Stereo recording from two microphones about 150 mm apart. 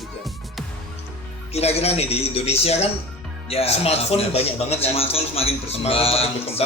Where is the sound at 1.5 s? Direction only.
45° left (ahead or behind).